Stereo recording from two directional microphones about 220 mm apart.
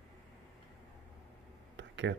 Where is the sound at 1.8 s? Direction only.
55° right (ahead or behind).